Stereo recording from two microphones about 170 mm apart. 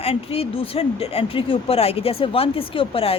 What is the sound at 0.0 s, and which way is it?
Speech, 35° left (ahead or behind).